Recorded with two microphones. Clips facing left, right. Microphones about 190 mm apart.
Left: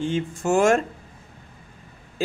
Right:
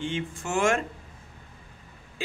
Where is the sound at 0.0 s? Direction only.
40° left (ahead or behind).